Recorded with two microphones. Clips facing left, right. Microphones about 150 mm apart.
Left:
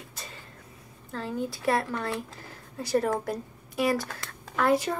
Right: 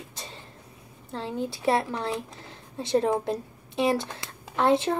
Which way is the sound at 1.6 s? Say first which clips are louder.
Right 2 dB; 25° right (ahead or behind).